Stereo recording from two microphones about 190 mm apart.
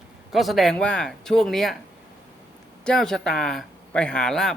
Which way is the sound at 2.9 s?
5° left (ahead or behind).